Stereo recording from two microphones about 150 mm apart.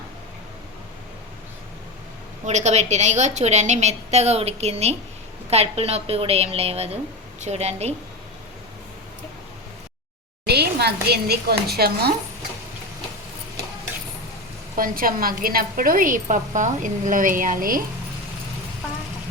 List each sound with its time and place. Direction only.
2.4 s a woman's voice: 50° right (ahead or behind)
10.4 s speech: 90° right
14.8 s a woman's voice: 70° right (ahead or behind)